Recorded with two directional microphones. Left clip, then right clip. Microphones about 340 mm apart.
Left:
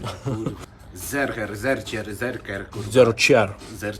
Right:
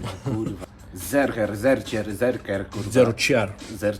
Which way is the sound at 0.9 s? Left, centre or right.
Centre.